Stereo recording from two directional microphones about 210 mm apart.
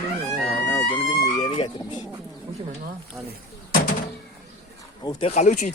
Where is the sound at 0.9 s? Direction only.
20° left (ahead or behind).